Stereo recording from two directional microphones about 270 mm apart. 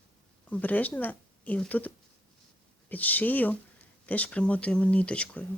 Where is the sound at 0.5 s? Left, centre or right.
Centre.